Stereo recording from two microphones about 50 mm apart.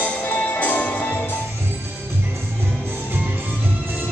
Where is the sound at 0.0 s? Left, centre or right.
Left.